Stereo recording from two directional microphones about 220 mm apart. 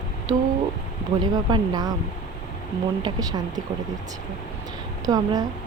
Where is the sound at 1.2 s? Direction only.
20° right (ahead or behind).